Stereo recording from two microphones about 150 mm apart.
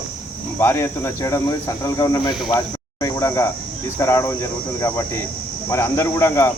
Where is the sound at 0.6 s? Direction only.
15° left (ahead or behind).